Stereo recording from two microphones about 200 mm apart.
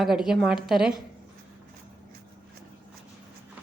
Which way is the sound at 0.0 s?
Centre (ahead or behind).